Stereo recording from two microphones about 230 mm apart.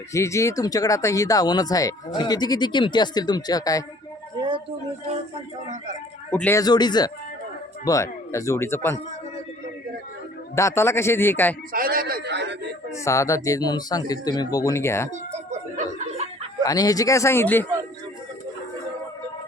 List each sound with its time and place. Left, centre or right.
0.1 s speech: centre
4.4 s a sound: right
6.3 s speech: centre
10.5 s speech: centre
11.7 s a man's voice: right
12.9 s speech: centre
15.4 s chuckle: right
16.6 s speech: centre